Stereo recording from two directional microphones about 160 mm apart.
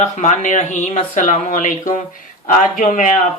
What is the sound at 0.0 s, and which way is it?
Speech, 50° left (ahead or behind).